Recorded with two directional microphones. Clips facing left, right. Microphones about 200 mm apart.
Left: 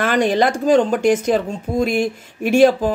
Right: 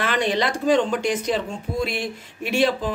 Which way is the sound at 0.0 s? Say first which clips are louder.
Left 6 dB; 45° left (ahead or behind).